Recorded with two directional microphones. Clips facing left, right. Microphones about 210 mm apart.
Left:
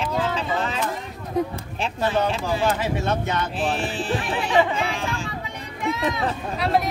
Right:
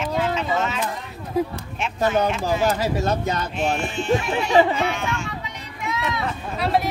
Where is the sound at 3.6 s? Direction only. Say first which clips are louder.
Right 1 dB; 35° left (ahead or behind).